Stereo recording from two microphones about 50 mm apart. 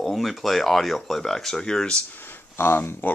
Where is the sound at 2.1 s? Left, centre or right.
Left.